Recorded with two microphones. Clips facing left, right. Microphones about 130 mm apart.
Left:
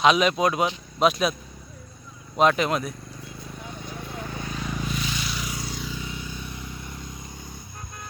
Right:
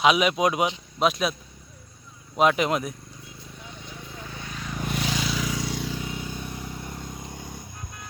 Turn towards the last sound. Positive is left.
turn(degrees=-60)  # may be behind; listen again after turning